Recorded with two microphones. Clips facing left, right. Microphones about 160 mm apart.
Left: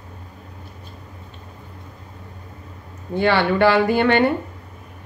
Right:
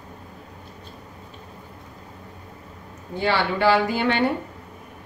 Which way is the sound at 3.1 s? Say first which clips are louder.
Left 5 dB; 60° left (ahead or behind).